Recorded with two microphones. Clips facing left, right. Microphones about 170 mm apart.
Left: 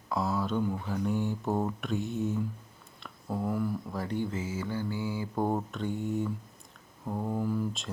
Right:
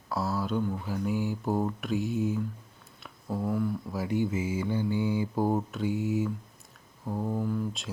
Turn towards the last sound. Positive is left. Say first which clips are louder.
# even
turn(degrees=0)  # may be behind; listen again after turning